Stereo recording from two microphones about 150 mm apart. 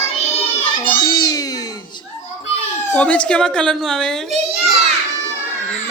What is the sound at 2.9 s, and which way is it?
A child's voice, 10° left (ahead or behind).